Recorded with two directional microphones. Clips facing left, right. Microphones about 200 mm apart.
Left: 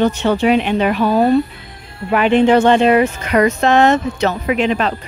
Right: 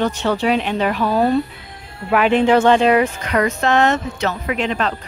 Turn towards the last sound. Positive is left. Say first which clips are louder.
# left 4 dB
turn(degrees=15)  # may be behind; listen again after turning